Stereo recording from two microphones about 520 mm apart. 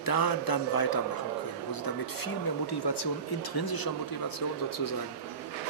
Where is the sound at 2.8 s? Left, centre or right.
Left.